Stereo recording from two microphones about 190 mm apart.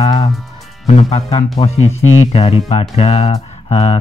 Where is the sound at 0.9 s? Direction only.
35° left (ahead or behind).